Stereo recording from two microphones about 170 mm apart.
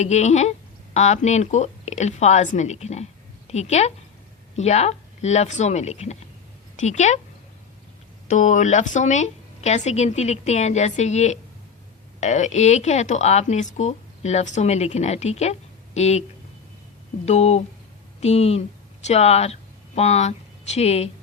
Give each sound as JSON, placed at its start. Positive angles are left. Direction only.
{"t": 0.0, "sound": "a woman's voice", "side_deg": 40}
{"t": 8.3, "sound": "a woman's voice", "side_deg": 45}
{"t": 17.2, "sound": "a woman's voice", "side_deg": 40}